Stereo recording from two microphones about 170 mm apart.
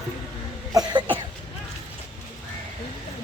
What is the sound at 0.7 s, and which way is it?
Cough, 25° right (ahead or behind).